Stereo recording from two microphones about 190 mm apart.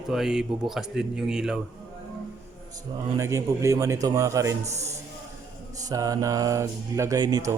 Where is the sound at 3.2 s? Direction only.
15° right (ahead or behind).